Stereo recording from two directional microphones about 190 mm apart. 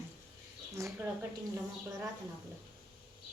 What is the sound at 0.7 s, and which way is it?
Speech, 15° right (ahead or behind).